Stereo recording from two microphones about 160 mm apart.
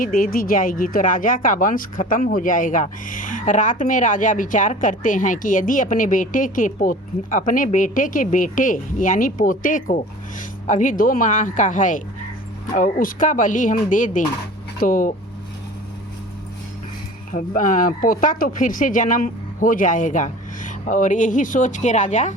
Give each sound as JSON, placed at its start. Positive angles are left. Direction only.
{"t": 0.0, "sound": "speech", "side_deg": 60}
{"t": 17.3, "sound": "speech", "side_deg": 55}